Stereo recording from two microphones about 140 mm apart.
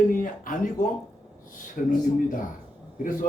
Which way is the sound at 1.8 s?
65° left (ahead or behind).